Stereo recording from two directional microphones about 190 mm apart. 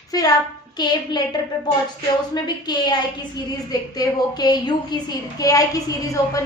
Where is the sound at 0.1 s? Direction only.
20° left (ahead or behind).